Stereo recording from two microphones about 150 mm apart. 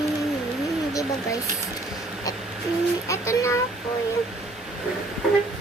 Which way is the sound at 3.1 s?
20° left (ahead or behind).